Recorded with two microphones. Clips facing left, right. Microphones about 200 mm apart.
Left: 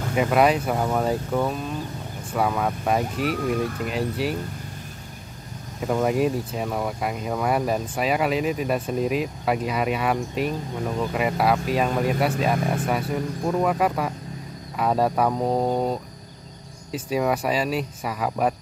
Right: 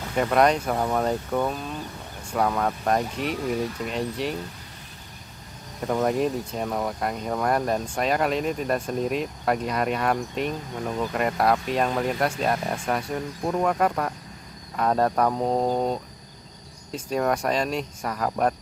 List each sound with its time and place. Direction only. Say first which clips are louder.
0.1 s speech: left 1 dB; 5° left (ahead or behind)
3.6 s speech: left 2 dB; 50° left (ahead or behind)
3.9 s speech: left 2 dB; 5° left (ahead or behind)
5.8 s speech: left 1 dB; 5° left (ahead or behind)